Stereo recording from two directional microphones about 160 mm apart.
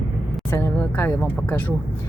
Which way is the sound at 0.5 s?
15° left (ahead or behind).